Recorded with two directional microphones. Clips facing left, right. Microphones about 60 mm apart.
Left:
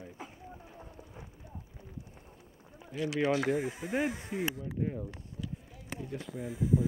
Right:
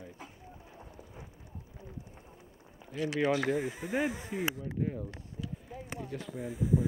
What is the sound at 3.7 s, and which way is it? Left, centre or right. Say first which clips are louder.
Speech: even; centre.